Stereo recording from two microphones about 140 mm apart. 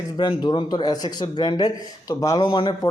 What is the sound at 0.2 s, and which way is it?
Speech, 30° left (ahead or behind).